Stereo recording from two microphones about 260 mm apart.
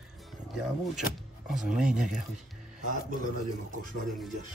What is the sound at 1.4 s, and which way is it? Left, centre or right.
Speech, centre.